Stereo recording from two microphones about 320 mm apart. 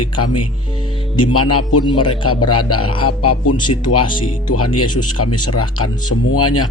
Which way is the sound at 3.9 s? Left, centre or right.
Left.